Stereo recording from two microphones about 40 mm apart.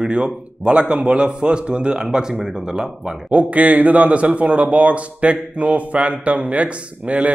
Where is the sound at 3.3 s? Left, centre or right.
Right.